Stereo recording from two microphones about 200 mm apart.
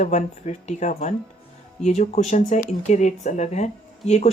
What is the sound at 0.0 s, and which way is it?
Speech, 35° left (ahead or behind).